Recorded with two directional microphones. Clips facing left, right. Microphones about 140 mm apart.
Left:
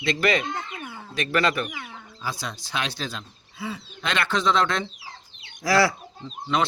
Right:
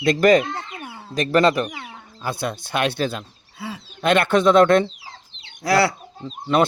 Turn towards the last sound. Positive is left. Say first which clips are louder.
# right 6 dB
turn(degrees=-50)  # may be behind; listen again after turning